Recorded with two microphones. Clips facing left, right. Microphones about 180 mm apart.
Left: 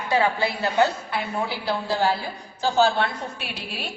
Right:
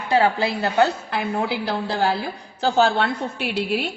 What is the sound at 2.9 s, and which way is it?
Speech, 70° right (ahead or behind).